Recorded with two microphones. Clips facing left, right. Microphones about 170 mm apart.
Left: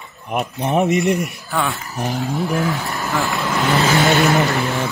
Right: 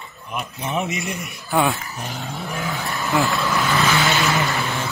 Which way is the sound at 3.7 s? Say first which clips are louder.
Left 6 dB; 30° left (ahead or behind).